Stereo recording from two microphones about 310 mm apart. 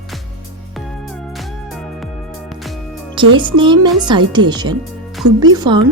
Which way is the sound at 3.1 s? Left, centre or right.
Centre.